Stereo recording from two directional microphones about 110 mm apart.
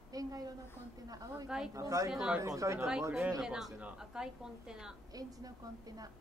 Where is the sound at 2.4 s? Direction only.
30° right (ahead or behind).